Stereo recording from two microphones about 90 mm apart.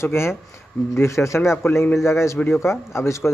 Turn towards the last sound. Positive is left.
turn(degrees=30)  # may be behind; listen again after turning